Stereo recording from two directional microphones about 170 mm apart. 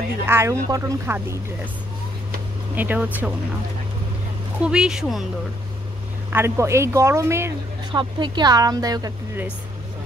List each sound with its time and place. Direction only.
0.3 s speech: 15° right (ahead or behind)
2.7 s speech: 10° right (ahead or behind)
4.6 s speech: 5° right (ahead or behind)
6.3 s speech: 15° right (ahead or behind)
7.9 s speech: 25° right (ahead or behind)